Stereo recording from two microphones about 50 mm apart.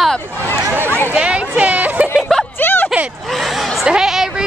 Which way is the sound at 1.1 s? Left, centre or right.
Right.